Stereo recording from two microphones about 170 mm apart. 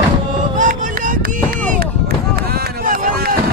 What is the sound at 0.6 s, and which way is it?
Run, 50° right (ahead or behind).